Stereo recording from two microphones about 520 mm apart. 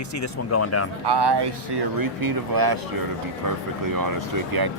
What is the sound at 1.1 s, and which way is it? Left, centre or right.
Speech, right.